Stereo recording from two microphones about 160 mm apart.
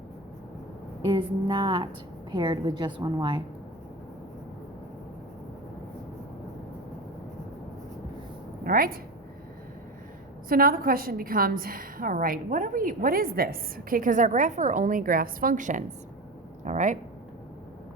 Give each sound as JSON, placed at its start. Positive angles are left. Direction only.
{"t": 1.0, "sound": "a woman's voice", "side_deg": -30}
{"t": 8.6, "sound": "a woman's voice", "side_deg": -65}
{"t": 10.5, "sound": "a woman's voice", "side_deg": -65}